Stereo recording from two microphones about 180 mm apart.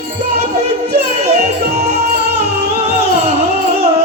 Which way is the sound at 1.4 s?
65° right (ahead or behind).